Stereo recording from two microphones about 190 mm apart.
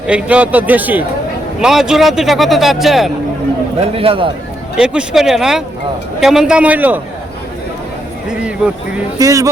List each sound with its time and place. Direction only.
0.1 s a man's voice: 5° right (ahead or behind)
3.8 s speech: 30° right (ahead or behind)
4.8 s speech: 5° right (ahead or behind)
9.1 s a man's voice: 15° right (ahead or behind)